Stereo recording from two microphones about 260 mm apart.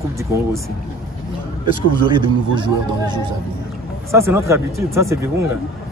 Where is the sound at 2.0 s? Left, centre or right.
Centre.